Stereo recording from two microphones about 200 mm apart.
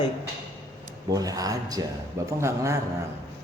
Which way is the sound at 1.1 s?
15° right (ahead or behind).